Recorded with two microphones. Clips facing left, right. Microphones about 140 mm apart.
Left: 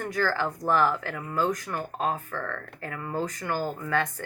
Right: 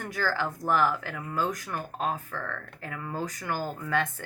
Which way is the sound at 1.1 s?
10° left (ahead or behind).